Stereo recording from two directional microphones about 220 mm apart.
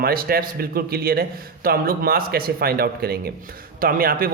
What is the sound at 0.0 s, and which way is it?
A man's voice, 40° right (ahead or behind).